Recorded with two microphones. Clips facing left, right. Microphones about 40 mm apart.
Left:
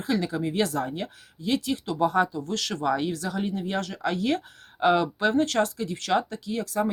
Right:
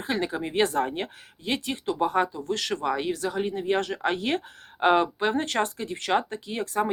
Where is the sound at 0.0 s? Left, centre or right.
Right.